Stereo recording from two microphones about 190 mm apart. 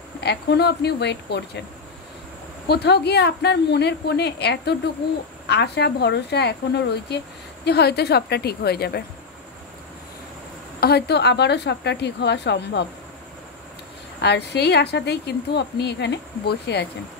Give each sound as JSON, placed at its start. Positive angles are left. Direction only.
{"t": 0.2, "sound": "a woman's voice", "side_deg": 60}
{"t": 2.7, "sound": "a woman's voice", "side_deg": 60}
{"t": 10.8, "sound": "a woman's voice", "side_deg": 60}
{"t": 14.2, "sound": "a woman's voice", "side_deg": 60}